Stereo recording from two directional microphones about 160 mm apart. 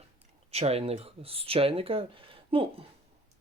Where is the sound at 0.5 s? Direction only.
40° right (ahead or behind).